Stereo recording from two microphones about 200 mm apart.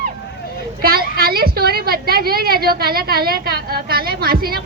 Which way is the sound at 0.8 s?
50° right (ahead or behind).